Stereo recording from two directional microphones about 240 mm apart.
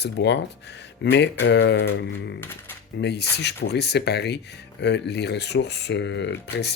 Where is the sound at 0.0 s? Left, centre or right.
Left.